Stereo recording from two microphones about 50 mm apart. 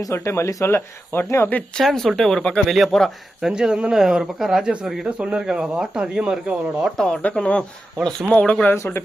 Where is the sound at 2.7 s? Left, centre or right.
Centre.